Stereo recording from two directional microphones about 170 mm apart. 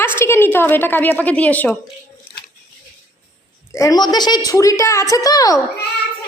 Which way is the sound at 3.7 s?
20° left (ahead or behind).